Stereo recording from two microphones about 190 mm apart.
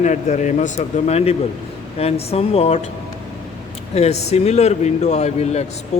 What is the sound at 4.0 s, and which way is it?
A man's voice, 35° left (ahead or behind).